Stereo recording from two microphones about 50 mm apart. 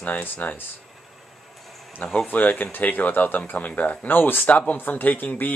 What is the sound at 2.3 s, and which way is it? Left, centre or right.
Speech, left.